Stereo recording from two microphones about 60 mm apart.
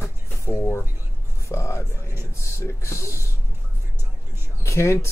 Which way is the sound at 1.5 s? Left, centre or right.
Left.